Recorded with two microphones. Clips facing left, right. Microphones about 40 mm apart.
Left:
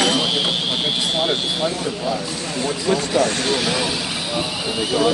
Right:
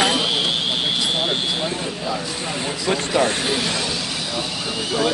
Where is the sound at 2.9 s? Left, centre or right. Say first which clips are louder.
Even; centre.